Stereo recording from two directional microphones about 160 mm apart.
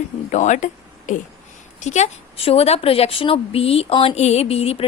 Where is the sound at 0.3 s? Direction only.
50° left (ahead or behind).